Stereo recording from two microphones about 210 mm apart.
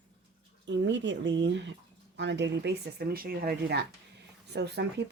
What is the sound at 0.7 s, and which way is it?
Speech, 60° right (ahead or behind).